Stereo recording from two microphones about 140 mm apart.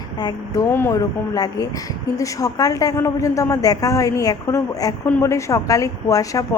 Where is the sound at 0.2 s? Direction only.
25° left (ahead or behind).